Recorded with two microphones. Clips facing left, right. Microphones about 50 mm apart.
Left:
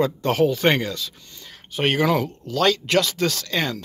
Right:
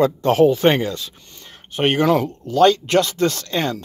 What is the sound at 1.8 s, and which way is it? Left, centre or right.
Speech, right.